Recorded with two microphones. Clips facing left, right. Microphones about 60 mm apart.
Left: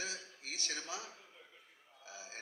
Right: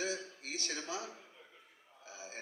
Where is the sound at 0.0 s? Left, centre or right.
Right.